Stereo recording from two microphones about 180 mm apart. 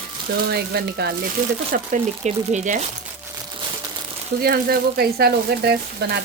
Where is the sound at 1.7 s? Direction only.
40° right (ahead or behind).